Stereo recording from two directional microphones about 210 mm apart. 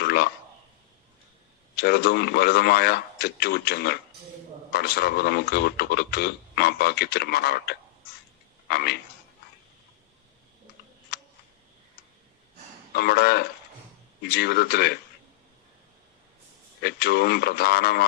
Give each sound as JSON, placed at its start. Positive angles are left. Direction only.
{"t": 0.0, "sound": "a sound", "side_deg": 50}
{"t": 1.7, "sound": "speech", "side_deg": 50}
{"t": 11.1, "sound": "camera", "side_deg": 45}
{"t": 12.9, "sound": "speech", "side_deg": 50}
{"t": 16.8, "sound": "speech", "side_deg": 50}